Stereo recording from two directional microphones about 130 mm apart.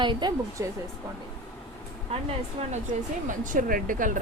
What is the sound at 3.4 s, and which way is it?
Speech, 85° right.